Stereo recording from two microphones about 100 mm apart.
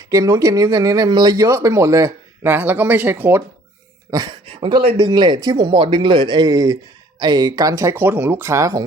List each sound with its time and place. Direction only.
0.1 s speech: 35° right (ahead or behind)
1.4 s speech: 30° right (ahead or behind)
4.1 s speech: 35° right (ahead or behind)
4.4 s speech: 70° right (ahead or behind); by 7.9 s 35° right (ahead or behind)
7.9 s speech: 20° right (ahead or behind)